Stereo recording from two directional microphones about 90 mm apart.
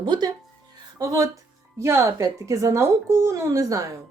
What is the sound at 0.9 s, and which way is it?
Speech, 40° right (ahead or behind).